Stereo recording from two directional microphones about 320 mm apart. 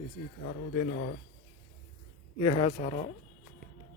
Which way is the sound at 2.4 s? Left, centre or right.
Centre.